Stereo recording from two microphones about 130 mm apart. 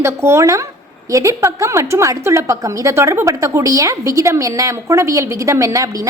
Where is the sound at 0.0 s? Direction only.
20° right (ahead or behind).